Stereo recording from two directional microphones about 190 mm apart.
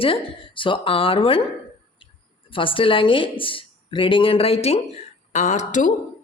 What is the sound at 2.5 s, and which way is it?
A woman's voice, 25° left (ahead or behind).